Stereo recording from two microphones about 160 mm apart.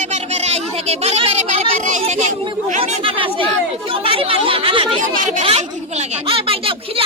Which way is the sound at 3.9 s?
35° right (ahead or behind).